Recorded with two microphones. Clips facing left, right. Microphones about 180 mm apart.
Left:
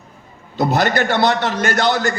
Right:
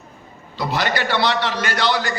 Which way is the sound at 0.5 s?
45° left (ahead or behind).